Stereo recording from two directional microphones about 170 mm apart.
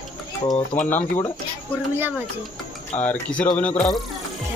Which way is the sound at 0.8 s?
10° left (ahead or behind).